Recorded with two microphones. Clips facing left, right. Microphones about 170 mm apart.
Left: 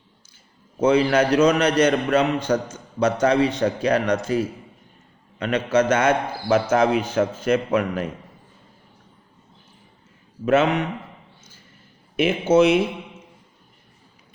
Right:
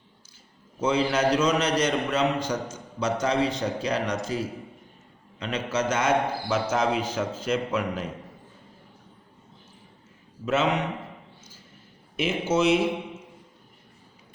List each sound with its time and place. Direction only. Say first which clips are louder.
0.8 s a man's voice: left 6 dB; 55° left (ahead or behind)
5.4 s a man's voice: left 8 dB; 55° left (ahead or behind)
10.4 s a man's voice: left 7 dB; 55° left (ahead or behind)
12.1 s a man's voice: left 7 dB; 55° left (ahead or behind)